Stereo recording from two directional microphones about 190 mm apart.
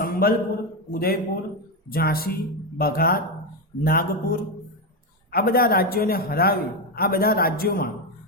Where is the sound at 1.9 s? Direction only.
50° left (ahead or behind).